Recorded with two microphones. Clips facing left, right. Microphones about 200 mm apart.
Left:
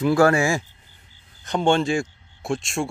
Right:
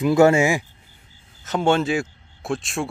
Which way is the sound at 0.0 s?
20° right (ahead or behind).